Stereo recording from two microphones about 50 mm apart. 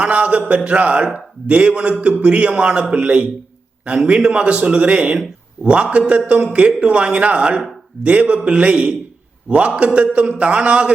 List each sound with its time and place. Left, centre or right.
0.0 s a man's voice: right